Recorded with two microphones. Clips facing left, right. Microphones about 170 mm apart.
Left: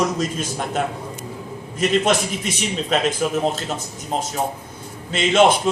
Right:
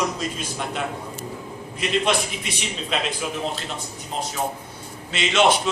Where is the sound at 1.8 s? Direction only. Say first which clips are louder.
Left 4 dB; 45° left (ahead or behind).